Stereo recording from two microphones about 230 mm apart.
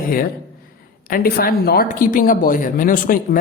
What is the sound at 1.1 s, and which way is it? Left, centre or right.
A woman's voice, left.